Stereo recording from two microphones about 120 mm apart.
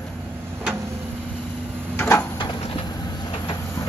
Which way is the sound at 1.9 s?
20° left (ahead or behind).